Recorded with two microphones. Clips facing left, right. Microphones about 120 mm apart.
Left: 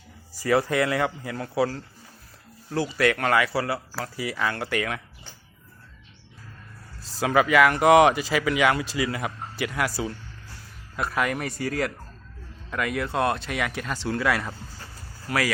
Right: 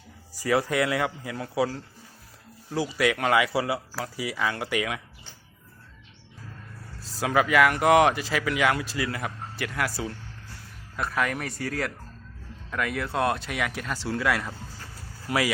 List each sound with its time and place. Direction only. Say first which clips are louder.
0.4 s speech: left 2 dB; 5° right (ahead or behind)
7.2 s speech: left 2 dB; centre (ahead or behind)
15.3 s speech: even; 20° right (ahead or behind)